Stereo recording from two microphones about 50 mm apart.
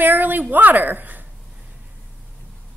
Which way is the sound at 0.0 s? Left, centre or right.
Right.